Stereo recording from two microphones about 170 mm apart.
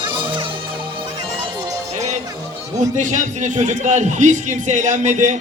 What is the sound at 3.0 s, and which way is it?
Speech, 45° right (ahead or behind).